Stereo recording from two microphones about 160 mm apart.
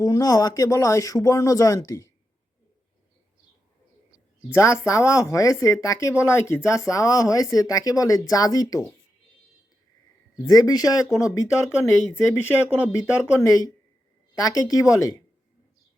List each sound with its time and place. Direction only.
0.0 s speech: 20° left (ahead or behind)
4.4 s speech: 15° left (ahead or behind)
10.3 s speech: 20° left (ahead or behind)